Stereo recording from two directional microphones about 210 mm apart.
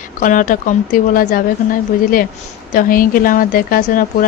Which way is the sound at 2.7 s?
40° left (ahead or behind).